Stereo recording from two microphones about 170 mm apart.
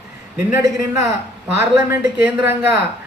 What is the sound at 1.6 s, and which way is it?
A man's voice, 15° right (ahead or behind).